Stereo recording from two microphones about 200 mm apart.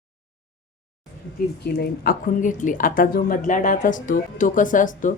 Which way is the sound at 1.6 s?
50° left (ahead or behind).